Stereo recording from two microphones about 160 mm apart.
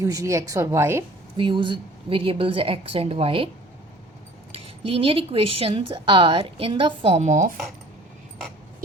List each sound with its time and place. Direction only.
0.0 s a woman's voice: 20° right (ahead or behind)
1.4 s a woman's voice: 30° right (ahead or behind)
4.5 s a woman's voice: 35° right (ahead or behind)